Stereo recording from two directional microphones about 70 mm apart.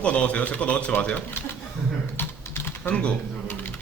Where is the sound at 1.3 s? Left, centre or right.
Left.